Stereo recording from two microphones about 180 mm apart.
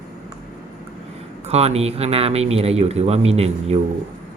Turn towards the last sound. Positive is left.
turn(degrees=-35)  # may be behind; listen again after turning